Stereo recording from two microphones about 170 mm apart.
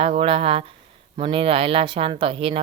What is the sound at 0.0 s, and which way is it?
Speech, 35° right (ahead or behind).